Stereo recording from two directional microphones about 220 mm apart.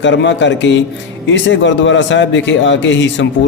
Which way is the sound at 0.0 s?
55° left (ahead or behind).